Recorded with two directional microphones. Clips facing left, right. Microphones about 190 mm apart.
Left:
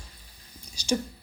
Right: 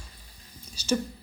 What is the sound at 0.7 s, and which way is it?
Speech, 15° left (ahead or behind).